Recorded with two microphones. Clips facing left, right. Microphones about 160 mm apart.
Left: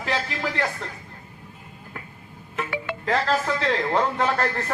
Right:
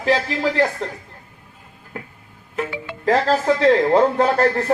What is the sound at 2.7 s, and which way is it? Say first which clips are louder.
Music: left 2 dB; 65° left (ahead or behind).